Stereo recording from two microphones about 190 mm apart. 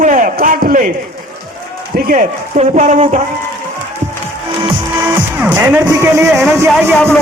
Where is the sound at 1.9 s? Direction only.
45° right (ahead or behind).